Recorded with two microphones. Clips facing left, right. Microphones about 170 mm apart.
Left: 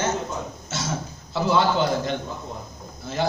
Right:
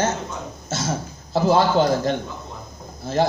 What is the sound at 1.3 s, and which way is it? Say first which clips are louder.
A man's voice: right 4 dB; 40° right (ahead or behind).